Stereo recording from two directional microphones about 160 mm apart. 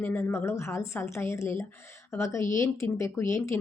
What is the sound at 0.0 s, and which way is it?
A woman's voice, 10° left (ahead or behind).